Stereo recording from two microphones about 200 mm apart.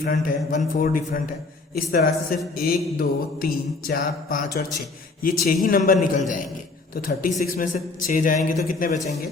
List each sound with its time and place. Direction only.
0.0 s speech: 45° left (ahead or behind)